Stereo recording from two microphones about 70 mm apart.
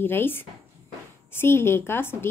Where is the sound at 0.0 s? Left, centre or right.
Left.